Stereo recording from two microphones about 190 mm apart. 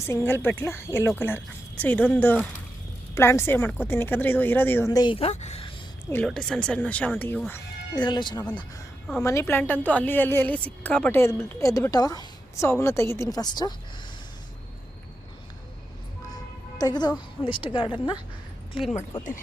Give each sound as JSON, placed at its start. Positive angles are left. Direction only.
{"t": 0.0, "sound": "a woman's voice", "side_deg": 10}
{"t": 6.1, "sound": "a woman's voice", "side_deg": 5}
{"t": 7.9, "sound": "a woman's voice", "side_deg": 25}
{"t": 16.3, "sound": "a woman's voice", "side_deg": 20}